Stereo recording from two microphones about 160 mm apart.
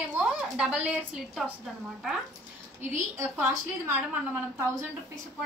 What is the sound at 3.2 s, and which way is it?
A woman's voice, 15° right (ahead or behind).